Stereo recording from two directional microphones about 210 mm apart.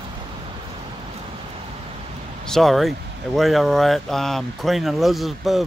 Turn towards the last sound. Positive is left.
turn(degrees=0)  # may be behind; listen again after turning